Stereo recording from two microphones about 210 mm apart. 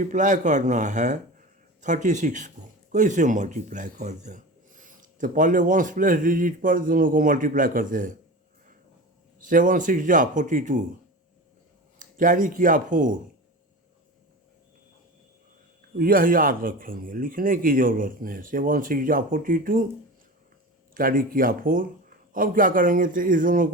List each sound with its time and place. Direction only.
0.0 s speech: 35° right (ahead or behind)
9.4 s speech: 40° right (ahead or behind)
11.9 s speech: 40° right (ahead or behind)
16.0 s speech: 45° right (ahead or behind)
20.9 s speech: 40° right (ahead or behind)